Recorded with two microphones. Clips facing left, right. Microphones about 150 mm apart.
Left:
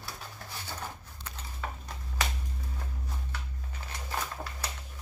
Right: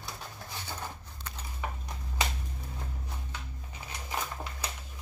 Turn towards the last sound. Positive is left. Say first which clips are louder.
# even
turn(degrees=-15)  # may be behind; listen again after turning